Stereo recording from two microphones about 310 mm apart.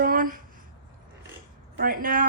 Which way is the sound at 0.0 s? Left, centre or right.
Right.